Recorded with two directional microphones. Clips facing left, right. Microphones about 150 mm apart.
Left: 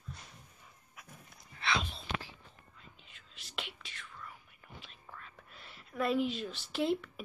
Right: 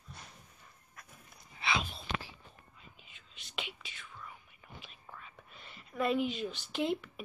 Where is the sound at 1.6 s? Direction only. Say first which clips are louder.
Even; 5° right (ahead or behind).